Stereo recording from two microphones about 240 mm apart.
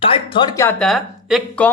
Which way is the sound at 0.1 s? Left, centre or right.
Left.